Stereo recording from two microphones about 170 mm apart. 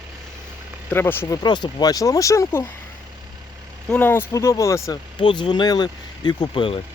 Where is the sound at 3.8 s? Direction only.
10° left (ahead or behind).